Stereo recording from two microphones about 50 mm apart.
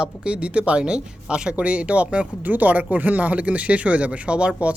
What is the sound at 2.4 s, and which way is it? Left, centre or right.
Speech, right.